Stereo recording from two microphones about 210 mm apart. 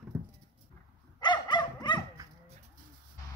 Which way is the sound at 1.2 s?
20° left (ahead or behind).